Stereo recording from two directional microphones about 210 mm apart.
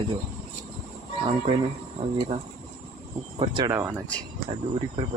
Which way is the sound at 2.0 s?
25° right (ahead or behind).